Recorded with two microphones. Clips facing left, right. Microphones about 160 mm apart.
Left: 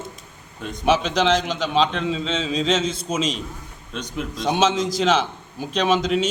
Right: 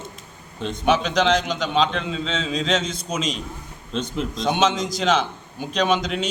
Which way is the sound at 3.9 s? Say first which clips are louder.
Right 3 dB; 30° right (ahead or behind).